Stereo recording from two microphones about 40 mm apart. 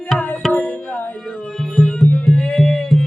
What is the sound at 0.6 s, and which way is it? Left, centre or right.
Tabla, left.